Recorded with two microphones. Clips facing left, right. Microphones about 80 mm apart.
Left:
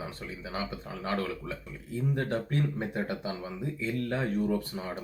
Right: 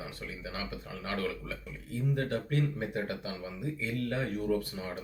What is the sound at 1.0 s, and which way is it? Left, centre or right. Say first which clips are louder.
Speech: left 3 dB; left.